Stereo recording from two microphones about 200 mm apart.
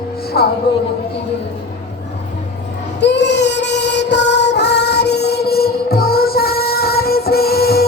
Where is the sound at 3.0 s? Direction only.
60° left (ahead or behind).